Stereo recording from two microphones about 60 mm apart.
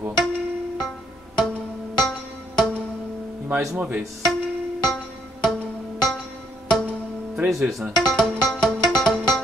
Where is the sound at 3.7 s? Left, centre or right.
Right.